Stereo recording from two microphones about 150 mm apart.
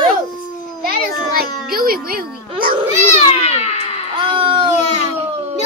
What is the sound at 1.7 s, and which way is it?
Music, 80° right.